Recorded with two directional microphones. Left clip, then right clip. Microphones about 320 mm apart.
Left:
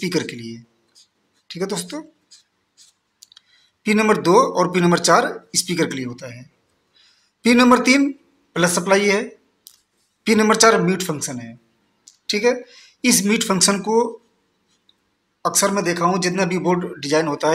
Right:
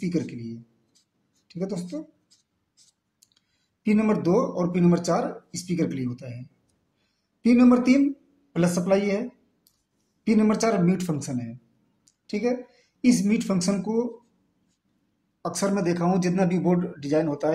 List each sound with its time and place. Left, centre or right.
0.0 s speech: right
3.2 s speech: right
7.4 s a man's voice: right
10.2 s a man's voice: right
12.0 s speech: right
15.4 s speech: right